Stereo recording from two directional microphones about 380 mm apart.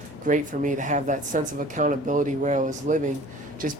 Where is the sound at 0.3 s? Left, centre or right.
Centre.